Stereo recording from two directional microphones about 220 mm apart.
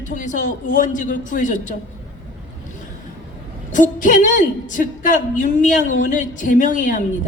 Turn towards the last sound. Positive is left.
turn(degrees=35)  # may be behind; listen again after turning